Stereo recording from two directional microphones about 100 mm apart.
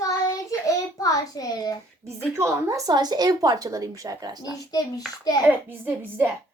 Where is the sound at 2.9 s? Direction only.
45° right (ahead or behind).